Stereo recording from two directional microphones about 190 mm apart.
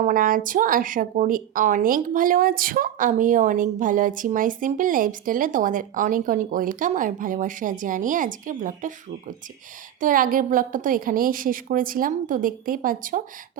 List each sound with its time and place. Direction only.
0.0 s a woman's voice: 45° right (ahead or behind)
10.0 s a woman's voice: 45° right (ahead or behind)